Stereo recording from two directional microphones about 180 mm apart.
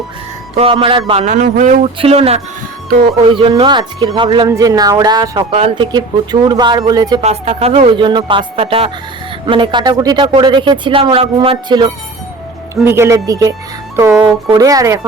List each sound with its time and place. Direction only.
0.6 s speech: 30° right (ahead or behind); by 1.9 s 45° right (ahead or behind)
2.0 s speech: 35° right (ahead or behind)
7.2 s speech: 40° right (ahead or behind)
12.8 s speech: 15° right (ahead or behind)